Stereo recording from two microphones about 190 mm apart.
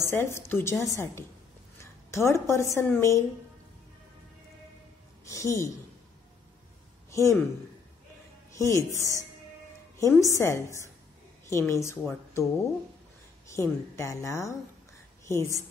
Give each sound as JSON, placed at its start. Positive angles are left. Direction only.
{"t": 0.0, "sound": "a woman's voice", "side_deg": 15}
{"t": 5.2, "sound": "a woman's voice", "side_deg": 15}
{"t": 7.1, "sound": "speech", "side_deg": 15}
{"t": 8.5, "sound": "a woman's voice", "side_deg": 15}